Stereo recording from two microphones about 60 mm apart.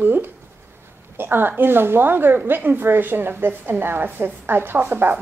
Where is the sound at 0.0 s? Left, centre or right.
Right.